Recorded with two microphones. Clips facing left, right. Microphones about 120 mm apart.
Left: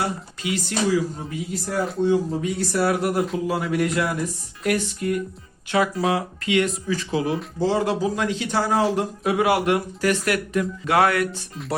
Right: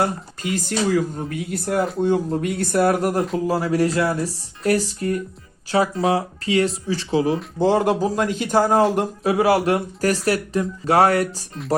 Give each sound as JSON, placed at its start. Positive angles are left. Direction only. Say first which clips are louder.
{"t": 0.0, "sound": "a man's voice", "louder": "right 4 dB", "side_deg": -45}
{"t": 0.9, "sound": "a man's voice", "louder": "right 1 dB", "side_deg": -55}
{"t": 7.6, "sound": "a man's voice", "louder": "right 4 dB", "side_deg": -50}
{"t": 9.2, "sound": "speech", "louder": "right 2 dB", "side_deg": -35}